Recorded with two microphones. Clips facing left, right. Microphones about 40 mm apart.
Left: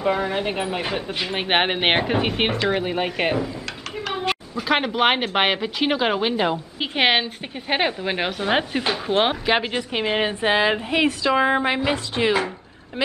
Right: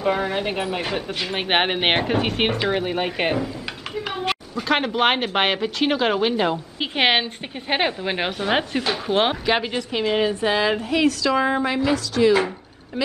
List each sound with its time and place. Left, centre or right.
0.0 s speech: centre
4.1 s a sound: centre
4.6 s speech: centre
9.7 s a woman's voice: left